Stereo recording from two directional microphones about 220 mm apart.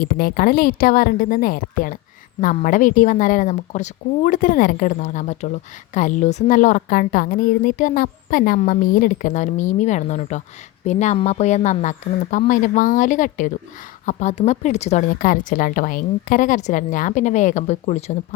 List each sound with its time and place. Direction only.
0.0 s a woman's voice: 40° left (ahead or behind)